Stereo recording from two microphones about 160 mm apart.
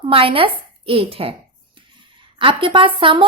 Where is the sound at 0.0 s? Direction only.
35° right (ahead or behind).